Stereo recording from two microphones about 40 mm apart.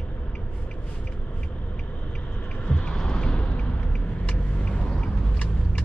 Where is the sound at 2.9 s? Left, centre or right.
Left.